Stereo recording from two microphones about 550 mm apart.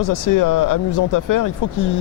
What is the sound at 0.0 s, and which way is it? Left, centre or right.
Speech, left.